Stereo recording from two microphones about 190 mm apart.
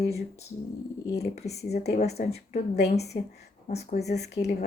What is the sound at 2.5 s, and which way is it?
Speech, 60° left (ahead or behind).